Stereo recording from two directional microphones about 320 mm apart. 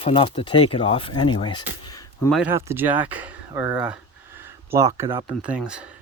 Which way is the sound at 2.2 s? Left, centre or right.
Centre.